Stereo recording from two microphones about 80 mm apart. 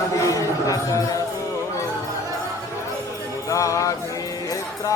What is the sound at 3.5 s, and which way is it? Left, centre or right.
Music, left.